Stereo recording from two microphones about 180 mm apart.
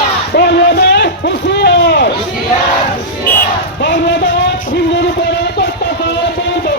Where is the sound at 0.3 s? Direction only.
65° left (ahead or behind).